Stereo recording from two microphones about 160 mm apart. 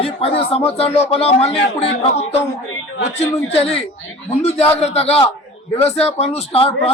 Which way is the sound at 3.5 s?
40° left (ahead or behind).